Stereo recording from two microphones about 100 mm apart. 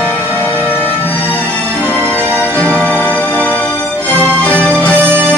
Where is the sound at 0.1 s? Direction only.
20° left (ahead or behind).